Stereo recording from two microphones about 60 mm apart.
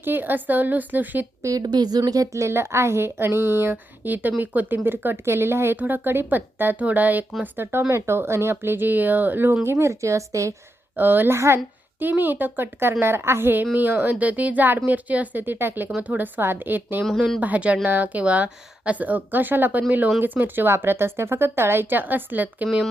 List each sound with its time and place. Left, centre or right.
0.0 s speech: right
1.4 s a woman's voice: right
2.4 s speech: right
5.7 s speech: right
9.9 s speech: right
10.9 s speech: right
11.3 s speech: right
11.9 s speech: right